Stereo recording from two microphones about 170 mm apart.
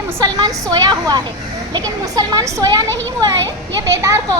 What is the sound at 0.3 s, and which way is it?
A child's voice, 20° right (ahead or behind).